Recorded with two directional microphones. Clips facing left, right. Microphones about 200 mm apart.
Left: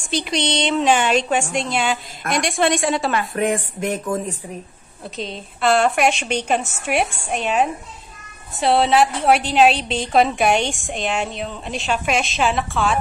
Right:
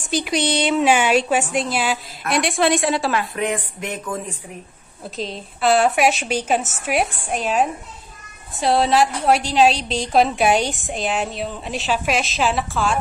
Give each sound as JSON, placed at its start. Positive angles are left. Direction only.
{"t": 0.2, "sound": "a woman's voice", "side_deg": -5}
{"t": 3.3, "sound": "speech", "side_deg": 45}
{"t": 5.0, "sound": "a woman's voice", "side_deg": 0}